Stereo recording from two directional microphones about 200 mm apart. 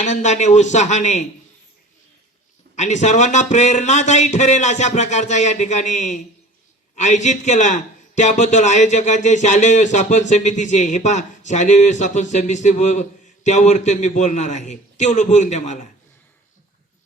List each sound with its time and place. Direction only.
0.0 s a man's voice: 35° left (ahead or behind)
2.7 s a man's voice: 35° left (ahead or behind)